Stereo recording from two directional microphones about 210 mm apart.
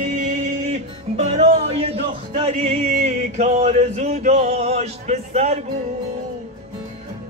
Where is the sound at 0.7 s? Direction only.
30° right (ahead or behind).